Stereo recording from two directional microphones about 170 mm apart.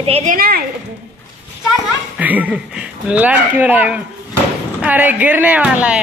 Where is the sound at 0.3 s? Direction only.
60° right (ahead or behind).